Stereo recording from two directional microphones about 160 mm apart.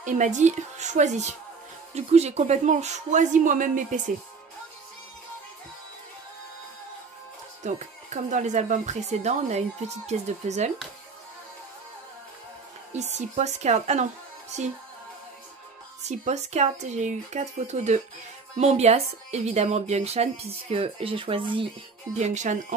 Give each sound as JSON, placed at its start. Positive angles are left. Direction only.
{"t": 0.0, "sound": "speech", "side_deg": -50}
{"t": 7.6, "sound": "speech", "side_deg": -50}
{"t": 12.9, "sound": "speech", "side_deg": -45}
{"t": 16.0, "sound": "a woman's voice", "side_deg": -45}
{"t": 22.1, "sound": "speech", "side_deg": -45}